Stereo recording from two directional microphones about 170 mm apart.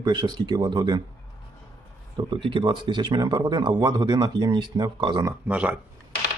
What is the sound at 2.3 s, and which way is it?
Speech, 30° right (ahead or behind).